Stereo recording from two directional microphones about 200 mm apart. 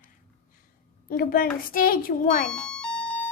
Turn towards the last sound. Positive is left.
turn(degrees=5)  # may be behind; listen again after turning